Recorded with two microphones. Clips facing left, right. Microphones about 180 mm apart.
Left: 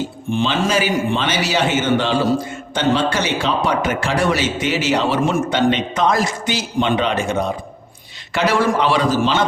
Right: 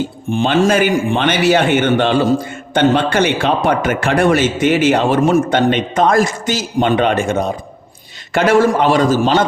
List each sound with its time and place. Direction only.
0.3 s a man's voice: 45° right (ahead or behind)